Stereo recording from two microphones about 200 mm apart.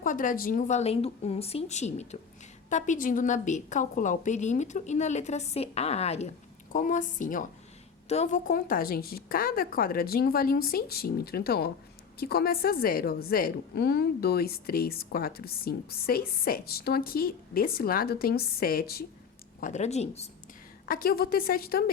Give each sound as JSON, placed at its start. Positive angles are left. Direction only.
{"t": 0.0, "sound": "a woman's voice", "side_deg": 40}
{"t": 19.5, "sound": "a woman's voice", "side_deg": 40}
{"t": 20.8, "sound": "a woman's voice", "side_deg": 45}